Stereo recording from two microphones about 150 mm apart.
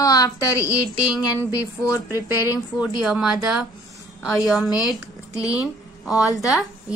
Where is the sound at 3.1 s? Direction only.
5° right (ahead or behind).